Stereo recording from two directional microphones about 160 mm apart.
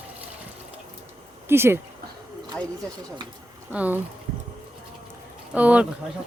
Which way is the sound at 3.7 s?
10° right (ahead or behind).